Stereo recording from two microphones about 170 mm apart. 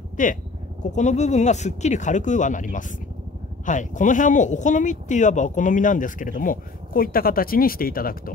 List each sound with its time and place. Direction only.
0.2 s speech: 50° left (ahead or behind)